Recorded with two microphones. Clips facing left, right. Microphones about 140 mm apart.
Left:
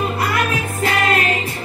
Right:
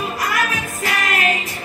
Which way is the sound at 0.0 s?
30° left (ahead or behind).